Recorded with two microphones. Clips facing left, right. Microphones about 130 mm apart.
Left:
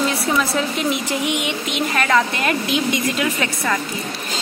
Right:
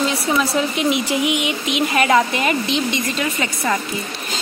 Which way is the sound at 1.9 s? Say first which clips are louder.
Right 2 dB; 15° right (ahead or behind).